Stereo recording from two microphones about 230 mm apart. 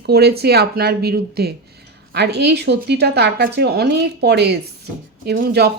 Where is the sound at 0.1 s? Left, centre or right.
Right.